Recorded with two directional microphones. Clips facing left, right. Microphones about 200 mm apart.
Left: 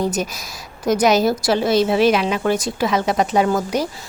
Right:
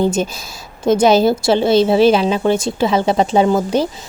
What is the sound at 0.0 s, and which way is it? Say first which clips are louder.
A woman's voice: right 5 dB; 25° right (ahead or behind).